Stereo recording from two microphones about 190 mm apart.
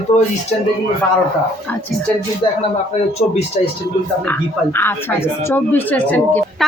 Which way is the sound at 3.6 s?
35° left (ahead or behind).